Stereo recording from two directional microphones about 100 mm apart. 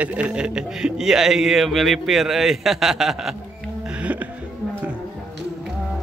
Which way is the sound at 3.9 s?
15° right (ahead or behind).